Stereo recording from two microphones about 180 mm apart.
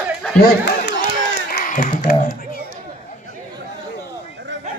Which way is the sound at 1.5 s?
55° left (ahead or behind).